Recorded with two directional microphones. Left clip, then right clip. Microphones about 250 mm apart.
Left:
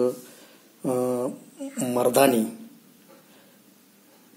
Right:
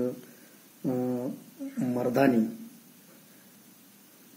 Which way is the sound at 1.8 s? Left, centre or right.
Centre.